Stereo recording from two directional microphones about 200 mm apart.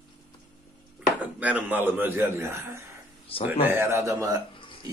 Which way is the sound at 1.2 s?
5° right (ahead or behind).